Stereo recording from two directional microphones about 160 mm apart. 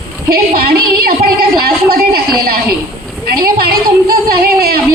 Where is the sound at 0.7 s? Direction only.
70° right (ahead or behind).